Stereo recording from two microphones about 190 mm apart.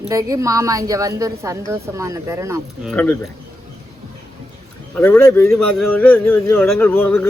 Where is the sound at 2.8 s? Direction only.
10° left (ahead or behind).